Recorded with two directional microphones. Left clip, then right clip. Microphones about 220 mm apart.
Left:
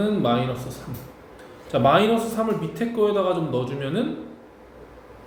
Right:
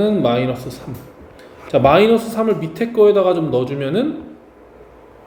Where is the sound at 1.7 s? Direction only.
30° right (ahead or behind).